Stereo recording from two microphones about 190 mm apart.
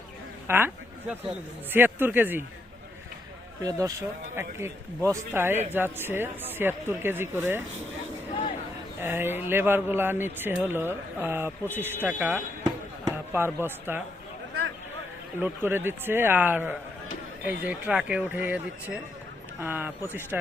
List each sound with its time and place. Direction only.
0.4 s speech: 10° right (ahead or behind)
3.6 s speech: 20° right (ahead or behind)
9.0 s speech: 10° right (ahead or behind)
12.6 s a sound: 15° right (ahead or behind)
15.4 s speech: 10° right (ahead or behind)